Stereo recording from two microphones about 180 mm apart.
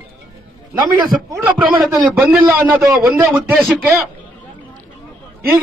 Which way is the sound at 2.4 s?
10° right (ahead or behind).